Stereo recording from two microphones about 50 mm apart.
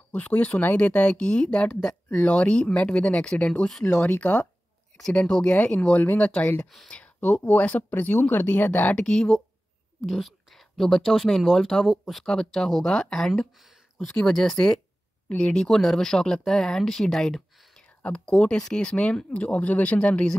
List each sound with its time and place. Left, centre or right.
0.1 s speech: left
9.0 s speech: centre
10.0 s speech: centre
15.2 s speech: left
15.7 s speech: centre; by 20.2 s left